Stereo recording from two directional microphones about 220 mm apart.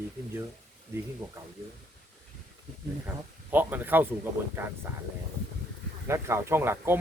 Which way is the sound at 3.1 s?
10° right (ahead or behind).